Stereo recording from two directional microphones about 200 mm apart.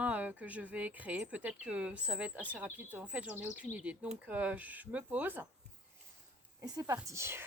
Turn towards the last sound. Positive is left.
turn(degrees=-10)  # may be behind; listen again after turning